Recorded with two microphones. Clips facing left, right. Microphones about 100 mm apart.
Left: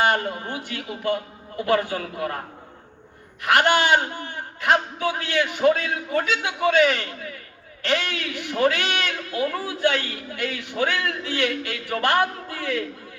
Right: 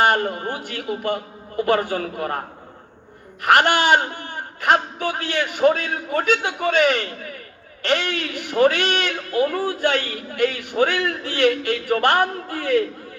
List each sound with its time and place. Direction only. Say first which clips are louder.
0.1 s a man's voice: right 3 dB; 45° right (ahead or behind)
3.4 s a man's voice: right 2 dB; 50° right (ahead or behind)